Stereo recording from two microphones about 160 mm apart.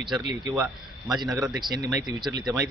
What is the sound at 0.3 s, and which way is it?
Speech, 20° right (ahead or behind).